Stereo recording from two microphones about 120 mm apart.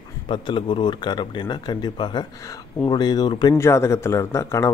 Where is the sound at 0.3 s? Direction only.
40° left (ahead or behind).